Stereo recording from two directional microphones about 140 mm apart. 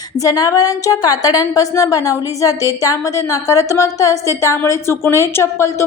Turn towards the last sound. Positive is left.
turn(degrees=20)  # may be behind; listen again after turning